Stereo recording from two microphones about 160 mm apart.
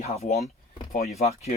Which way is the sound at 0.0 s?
40° left (ahead or behind).